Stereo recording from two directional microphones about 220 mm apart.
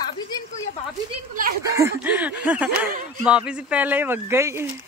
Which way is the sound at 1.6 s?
10° right (ahead or behind).